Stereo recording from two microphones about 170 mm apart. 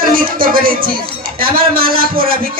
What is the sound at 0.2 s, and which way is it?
A man's voice, 55° right (ahead or behind).